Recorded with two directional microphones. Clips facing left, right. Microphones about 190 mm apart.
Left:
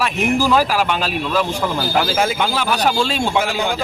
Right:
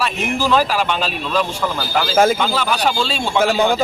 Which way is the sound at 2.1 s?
45° right (ahead or behind).